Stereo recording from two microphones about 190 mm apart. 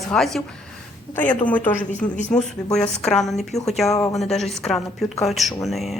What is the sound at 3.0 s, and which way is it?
A woman's voice, centre (ahead or behind).